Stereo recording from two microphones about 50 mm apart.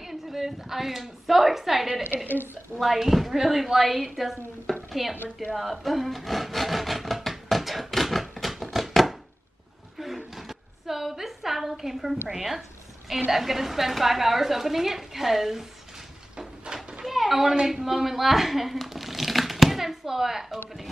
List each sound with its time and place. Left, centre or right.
0.0 s a woman's voice: centre
4.7 s dishes: centre
5.1 s a woman's voice: right
5.5 s wood: centre
9.9 s a sound: centre
12.3 s a woman's voice: centre
16.3 s a sound: centre
17.0 s a sound: centre
17.6 s speech: centre